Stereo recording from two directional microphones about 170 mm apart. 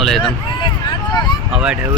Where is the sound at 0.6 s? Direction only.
25° left (ahead or behind).